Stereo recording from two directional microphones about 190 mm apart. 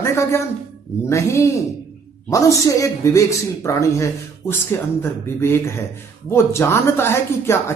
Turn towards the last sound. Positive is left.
turn(degrees=15)  # may be behind; listen again after turning